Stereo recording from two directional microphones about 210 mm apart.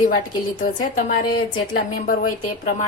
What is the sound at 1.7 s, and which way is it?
A woman's voice, 40° left (ahead or behind).